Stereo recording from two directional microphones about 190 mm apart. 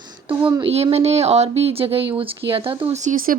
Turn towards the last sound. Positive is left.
turn(degrees=-40)  # may be behind; listen again after turning